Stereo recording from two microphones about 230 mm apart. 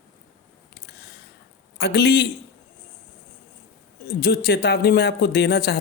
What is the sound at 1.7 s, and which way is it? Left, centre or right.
Speech, left.